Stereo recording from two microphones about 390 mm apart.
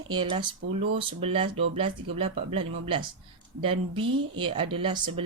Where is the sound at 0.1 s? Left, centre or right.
Centre.